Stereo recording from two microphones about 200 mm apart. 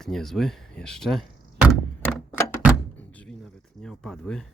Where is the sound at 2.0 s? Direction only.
10° left (ahead or behind).